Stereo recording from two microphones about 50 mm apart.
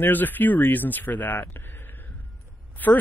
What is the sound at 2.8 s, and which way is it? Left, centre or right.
Speech, left.